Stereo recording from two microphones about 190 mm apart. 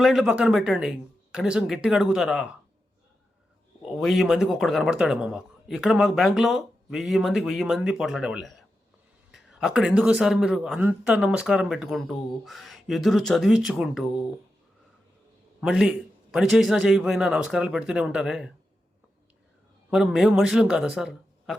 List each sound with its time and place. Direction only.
0.0 s speech: centre (ahead or behind)
3.8 s speech: centre (ahead or behind)
15.6 s speech: 5° right (ahead or behind)
19.9 s speech: 5° right (ahead or behind)